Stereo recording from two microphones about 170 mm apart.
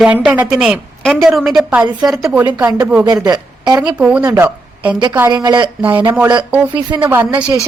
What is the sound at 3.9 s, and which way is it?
Speech, 5° right (ahead or behind).